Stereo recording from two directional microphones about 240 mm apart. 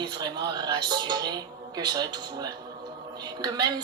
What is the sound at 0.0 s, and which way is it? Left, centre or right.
Speech, centre.